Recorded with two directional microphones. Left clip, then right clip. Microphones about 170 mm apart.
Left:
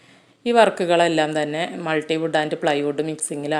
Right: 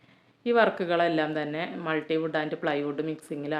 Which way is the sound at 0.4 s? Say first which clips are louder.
Left 7 dB; 35° left (ahead or behind).